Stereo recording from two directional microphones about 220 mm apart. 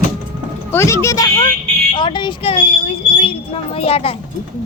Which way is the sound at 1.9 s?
20° left (ahead or behind).